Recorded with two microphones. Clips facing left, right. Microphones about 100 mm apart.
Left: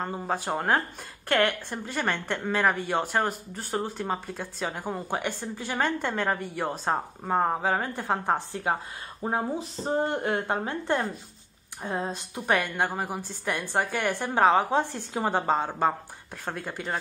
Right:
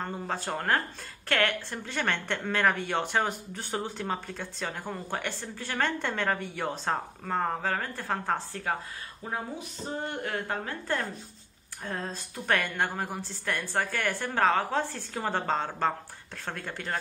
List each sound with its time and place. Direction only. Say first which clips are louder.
0.0 s a woman's voice: left 3 dB; 10° left (ahead or behind)
6.8 s a woman's voice: left 3 dB; 15° left (ahead or behind)
9.2 s a woman's voice: left 7 dB; 35° left (ahead or behind); by 17.0 s 10° left (ahead or behind)